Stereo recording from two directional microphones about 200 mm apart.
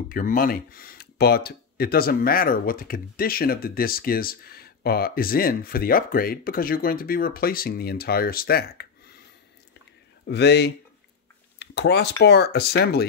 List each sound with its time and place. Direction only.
0.1 s speech: 45° left (ahead or behind)
10.2 s speech: 60° left (ahead or behind)